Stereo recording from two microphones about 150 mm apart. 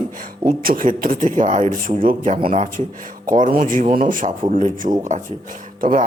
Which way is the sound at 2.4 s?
40° right (ahead or behind).